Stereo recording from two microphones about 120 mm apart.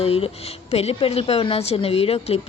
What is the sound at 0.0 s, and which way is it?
Speech, 55° left (ahead or behind).